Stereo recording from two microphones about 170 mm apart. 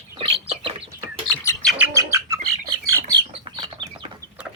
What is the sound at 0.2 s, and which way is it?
Bird, 30° right (ahead or behind).